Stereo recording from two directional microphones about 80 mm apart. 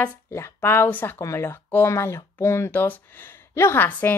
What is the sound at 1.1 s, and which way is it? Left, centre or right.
Speech, left.